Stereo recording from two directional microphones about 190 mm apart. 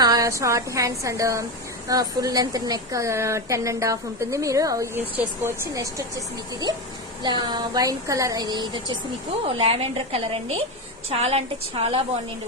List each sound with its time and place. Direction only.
0.0 s a woman's voice: 20° right (ahead or behind)